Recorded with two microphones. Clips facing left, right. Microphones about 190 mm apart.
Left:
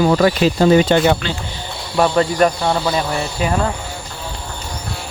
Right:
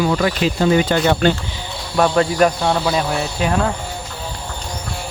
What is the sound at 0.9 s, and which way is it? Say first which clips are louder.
Speech: left 4 dB; 25° left (ahead or behind).